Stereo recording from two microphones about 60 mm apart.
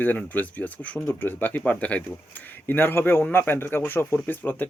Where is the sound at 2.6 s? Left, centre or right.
Left.